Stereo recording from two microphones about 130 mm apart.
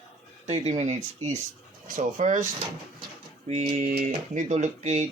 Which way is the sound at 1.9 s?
80° right.